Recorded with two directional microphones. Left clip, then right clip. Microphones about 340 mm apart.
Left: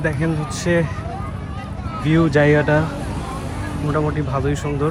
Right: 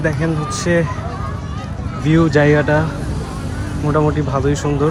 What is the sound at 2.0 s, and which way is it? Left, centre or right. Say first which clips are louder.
Speech: right 2 dB; centre.